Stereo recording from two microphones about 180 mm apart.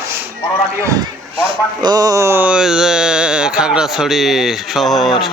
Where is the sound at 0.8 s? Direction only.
15° right (ahead or behind); by 5.1 s centre (ahead or behind).